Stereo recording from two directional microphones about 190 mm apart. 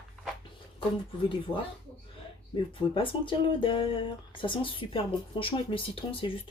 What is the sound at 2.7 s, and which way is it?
Speech, 25° left (ahead or behind).